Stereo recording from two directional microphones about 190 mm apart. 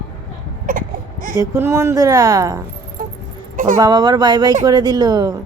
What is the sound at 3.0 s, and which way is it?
Music, 45° right (ahead or behind).